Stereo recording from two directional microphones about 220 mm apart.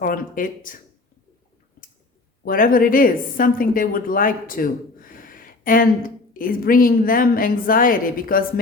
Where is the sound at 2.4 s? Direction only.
40° left (ahead or behind).